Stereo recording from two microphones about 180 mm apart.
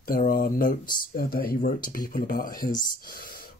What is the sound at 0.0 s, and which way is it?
Speech, 50° left (ahead or behind).